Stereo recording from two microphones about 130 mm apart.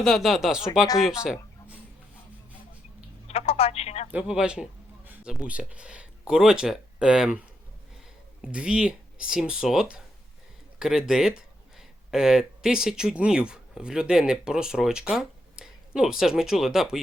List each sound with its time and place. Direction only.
0.0 s speech: centre (ahead or behind)
3.2 s speech: 50° left (ahead or behind)
4.1 s speech: 10° right (ahead or behind)